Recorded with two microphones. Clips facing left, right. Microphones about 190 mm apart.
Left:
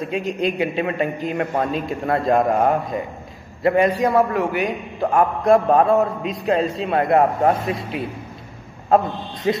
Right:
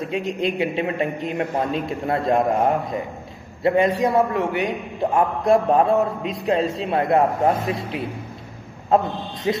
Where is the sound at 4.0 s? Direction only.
20° right (ahead or behind).